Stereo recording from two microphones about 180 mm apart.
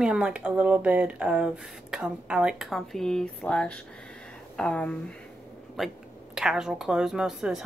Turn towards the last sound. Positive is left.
turn(degrees=-5)  # may be behind; listen again after turning